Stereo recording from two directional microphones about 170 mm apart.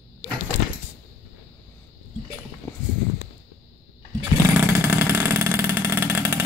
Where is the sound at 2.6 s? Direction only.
15° left (ahead or behind).